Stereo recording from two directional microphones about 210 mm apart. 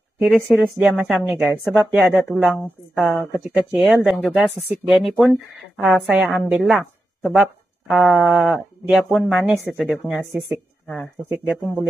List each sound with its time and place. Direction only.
0.3 s a woman's voice: centre (ahead or behind)
11.4 s speech: centre (ahead or behind)